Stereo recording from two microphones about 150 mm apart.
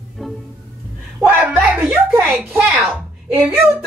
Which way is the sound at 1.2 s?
10° right (ahead or behind).